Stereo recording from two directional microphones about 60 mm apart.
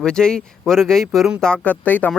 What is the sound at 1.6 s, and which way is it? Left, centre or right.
Speech, left.